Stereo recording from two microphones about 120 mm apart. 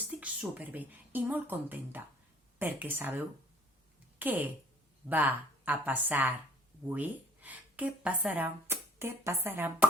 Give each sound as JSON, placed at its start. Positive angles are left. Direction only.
{"t": 0.2, "sound": "a woman's voice", "side_deg": -15}